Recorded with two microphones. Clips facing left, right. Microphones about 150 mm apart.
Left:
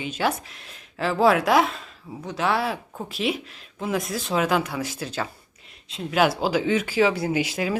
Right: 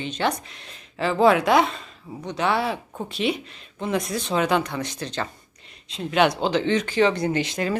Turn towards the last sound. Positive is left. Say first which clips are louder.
# even
turn(degrees=5)  # may be behind; listen again after turning